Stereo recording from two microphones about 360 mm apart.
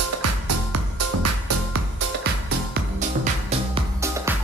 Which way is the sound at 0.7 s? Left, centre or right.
Right.